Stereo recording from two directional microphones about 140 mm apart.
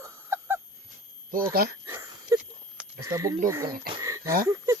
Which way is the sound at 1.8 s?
20° right (ahead or behind).